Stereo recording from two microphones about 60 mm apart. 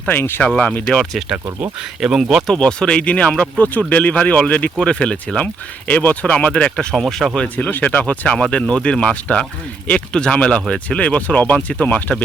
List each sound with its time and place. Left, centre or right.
0.1 s speech: left
0.4 s speech: left
0.9 s speech: centre
2.0 s speech: centre
2.5 s speech: centre
7.3 s speech: left